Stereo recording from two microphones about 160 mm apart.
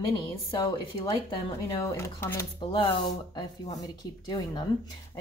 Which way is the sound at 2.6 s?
30° left (ahead or behind).